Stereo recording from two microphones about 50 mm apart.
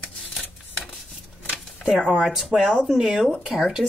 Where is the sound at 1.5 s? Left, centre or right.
Centre.